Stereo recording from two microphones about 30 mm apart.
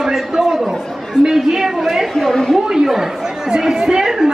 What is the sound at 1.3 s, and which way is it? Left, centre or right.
Speech, centre.